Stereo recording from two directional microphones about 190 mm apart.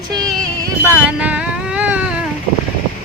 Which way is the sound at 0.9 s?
10° right (ahead or behind).